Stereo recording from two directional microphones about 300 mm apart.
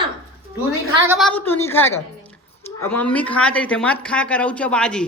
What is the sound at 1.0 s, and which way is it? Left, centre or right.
A woman's voice, centre.